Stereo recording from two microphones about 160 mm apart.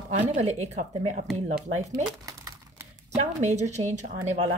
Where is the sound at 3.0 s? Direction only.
45° right (ahead or behind).